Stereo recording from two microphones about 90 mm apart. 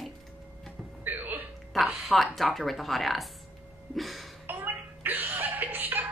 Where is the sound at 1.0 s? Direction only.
20° right (ahead or behind).